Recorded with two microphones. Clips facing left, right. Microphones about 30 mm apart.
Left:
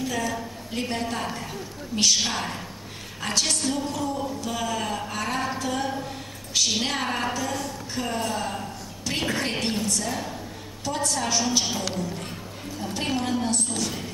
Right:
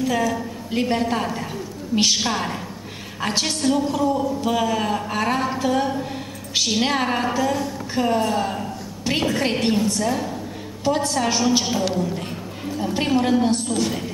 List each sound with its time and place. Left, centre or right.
0.3 s a woman's voice: centre
8.2 s a sound: centre
9.4 s a woman's voice: centre
10.8 s a woman's voice: right